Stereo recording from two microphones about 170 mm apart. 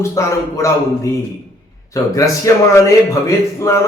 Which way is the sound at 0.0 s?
15° left (ahead or behind).